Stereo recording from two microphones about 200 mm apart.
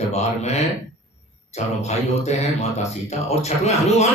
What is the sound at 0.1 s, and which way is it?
Speech, 35° left (ahead or behind).